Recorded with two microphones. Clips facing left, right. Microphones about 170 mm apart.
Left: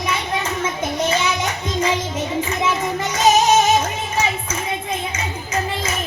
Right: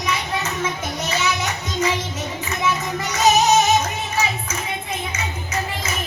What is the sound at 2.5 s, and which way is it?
Music, 30° left (ahead or behind).